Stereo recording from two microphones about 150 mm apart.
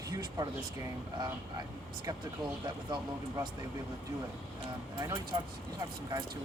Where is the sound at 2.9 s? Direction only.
30° right (ahead or behind).